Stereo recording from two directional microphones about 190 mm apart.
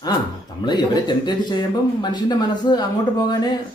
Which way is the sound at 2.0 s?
20° left (ahead or behind).